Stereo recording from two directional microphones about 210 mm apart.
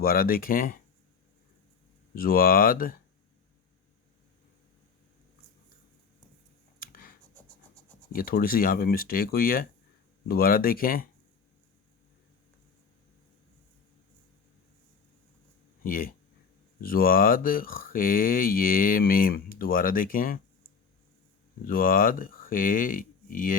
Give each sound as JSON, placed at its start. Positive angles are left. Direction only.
{"t": 0.0, "sound": "speech", "side_deg": 45}
{"t": 2.1, "sound": "speech", "side_deg": 45}
{"t": 6.7, "sound": "a sound", "side_deg": 45}
{"t": 8.1, "sound": "speech", "side_deg": 45}
{"t": 15.8, "sound": "speech", "side_deg": 45}
{"t": 21.7, "sound": "speech", "side_deg": 45}